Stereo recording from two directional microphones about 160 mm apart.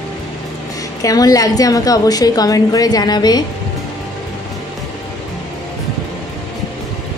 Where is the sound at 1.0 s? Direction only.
20° left (ahead or behind).